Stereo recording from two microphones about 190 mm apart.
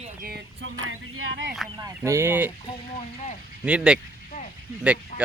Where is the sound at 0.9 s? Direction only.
75° right (ahead or behind).